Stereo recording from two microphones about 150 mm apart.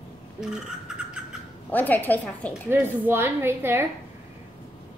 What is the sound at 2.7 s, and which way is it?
A woman's voice, 15° right (ahead or behind).